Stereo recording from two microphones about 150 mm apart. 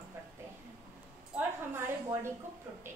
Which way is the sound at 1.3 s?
15° right (ahead or behind).